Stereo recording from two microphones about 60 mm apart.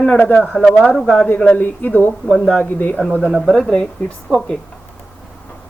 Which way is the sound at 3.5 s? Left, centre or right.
Centre.